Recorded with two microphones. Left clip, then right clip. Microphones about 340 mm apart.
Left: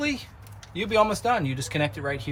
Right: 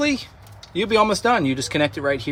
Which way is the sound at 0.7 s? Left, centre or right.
Centre.